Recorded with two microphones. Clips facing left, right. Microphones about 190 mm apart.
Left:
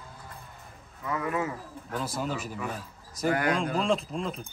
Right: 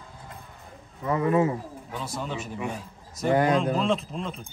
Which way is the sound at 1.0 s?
30° right (ahead or behind).